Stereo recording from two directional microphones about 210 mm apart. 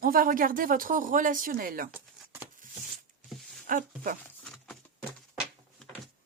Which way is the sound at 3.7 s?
40° right (ahead or behind).